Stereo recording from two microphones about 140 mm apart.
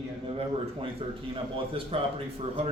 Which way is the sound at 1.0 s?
35° right (ahead or behind).